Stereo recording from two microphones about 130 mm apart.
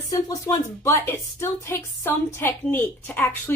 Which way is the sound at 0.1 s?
25° left (ahead or behind).